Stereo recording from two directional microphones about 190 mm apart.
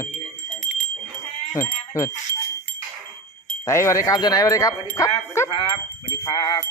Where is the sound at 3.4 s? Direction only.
15° left (ahead or behind).